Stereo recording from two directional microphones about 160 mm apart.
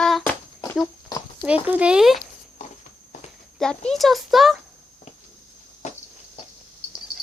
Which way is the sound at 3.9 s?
Centre (ahead or behind).